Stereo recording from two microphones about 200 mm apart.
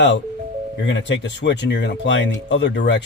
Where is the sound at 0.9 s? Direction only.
65° left (ahead or behind).